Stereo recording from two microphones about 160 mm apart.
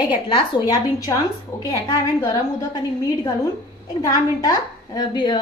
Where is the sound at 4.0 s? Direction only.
20° left (ahead or behind).